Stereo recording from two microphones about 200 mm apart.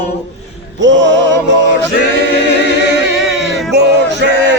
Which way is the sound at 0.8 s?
65° right (ahead or behind).